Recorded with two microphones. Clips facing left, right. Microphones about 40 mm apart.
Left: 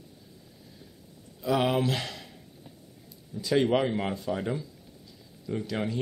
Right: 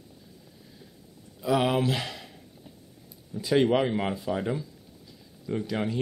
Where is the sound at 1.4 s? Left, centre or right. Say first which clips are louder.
Right 1 dB; centre.